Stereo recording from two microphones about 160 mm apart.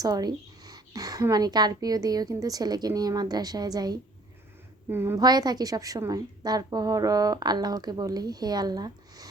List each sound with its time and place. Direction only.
0.0 s a woman's voice: 25° right (ahead or behind)
4.9 s a woman's voice: 15° right (ahead or behind)